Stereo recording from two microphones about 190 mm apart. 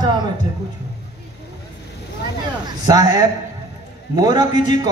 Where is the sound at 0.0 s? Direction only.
20° right (ahead or behind).